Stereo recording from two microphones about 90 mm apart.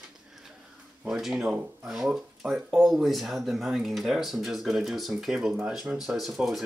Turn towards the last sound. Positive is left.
turn(degrees=0)  # may be behind; listen again after turning